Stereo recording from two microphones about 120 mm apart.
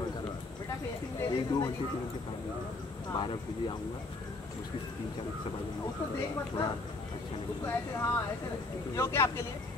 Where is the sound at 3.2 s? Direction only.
45° left (ahead or behind).